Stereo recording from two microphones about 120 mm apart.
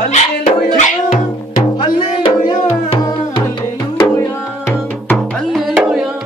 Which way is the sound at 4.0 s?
20° left (ahead or behind).